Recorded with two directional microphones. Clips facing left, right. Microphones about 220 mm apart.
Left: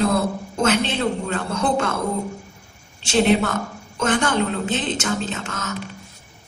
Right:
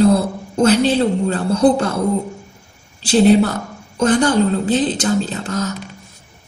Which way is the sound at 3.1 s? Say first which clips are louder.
Right 6 dB; 35° right (ahead or behind).